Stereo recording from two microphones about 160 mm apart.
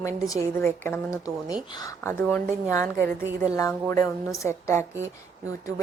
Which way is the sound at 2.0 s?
15° left (ahead or behind).